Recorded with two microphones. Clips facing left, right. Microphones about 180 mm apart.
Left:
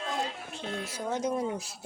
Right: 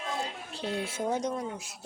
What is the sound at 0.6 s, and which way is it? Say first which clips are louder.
Speech: right 4 dB; 30° right (ahead or behind).